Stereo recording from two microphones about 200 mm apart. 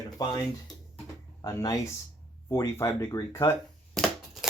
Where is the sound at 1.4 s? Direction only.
15° left (ahead or behind).